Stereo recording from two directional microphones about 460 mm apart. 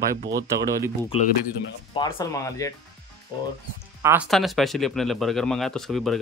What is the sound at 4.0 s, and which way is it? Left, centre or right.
Speech, centre.